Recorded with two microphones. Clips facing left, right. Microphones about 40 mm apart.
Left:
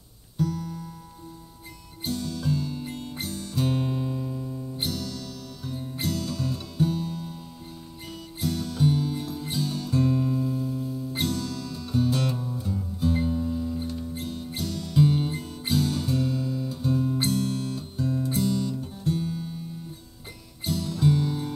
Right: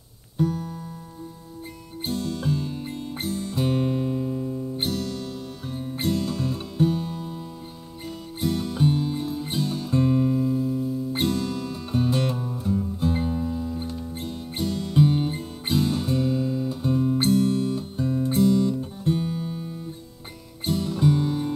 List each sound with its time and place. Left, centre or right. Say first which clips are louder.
0.4 s music: right 3 dB; right
2.0 s music: right 2 dB; right; by 4.7 s centre
4.8 s music: right 2 dB; right; by 11.1 s centre
11.1 s music: right 3 dB; right